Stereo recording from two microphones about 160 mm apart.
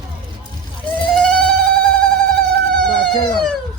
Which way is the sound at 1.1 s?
5° left (ahead or behind).